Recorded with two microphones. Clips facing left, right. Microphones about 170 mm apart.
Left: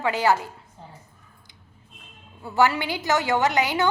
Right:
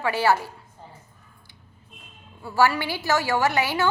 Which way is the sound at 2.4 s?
20° left (ahead or behind).